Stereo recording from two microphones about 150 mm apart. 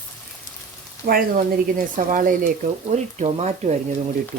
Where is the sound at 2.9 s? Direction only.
45° right (ahead or behind).